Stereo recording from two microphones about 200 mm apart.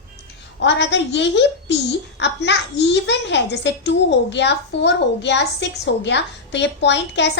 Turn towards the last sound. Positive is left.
turn(degrees=60)  # may be behind; listen again after turning